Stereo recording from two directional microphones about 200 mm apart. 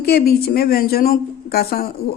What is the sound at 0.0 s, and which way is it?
Speech, 50° left (ahead or behind).